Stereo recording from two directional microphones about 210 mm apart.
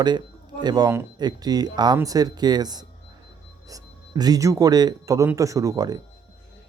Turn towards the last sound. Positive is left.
turn(degrees=-20)  # may be behind; listen again after turning